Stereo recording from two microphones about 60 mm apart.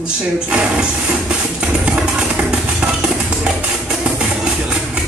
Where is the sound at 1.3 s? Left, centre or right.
Centre.